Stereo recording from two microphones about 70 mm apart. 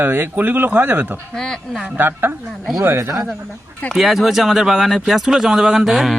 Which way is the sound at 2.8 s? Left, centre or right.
Right.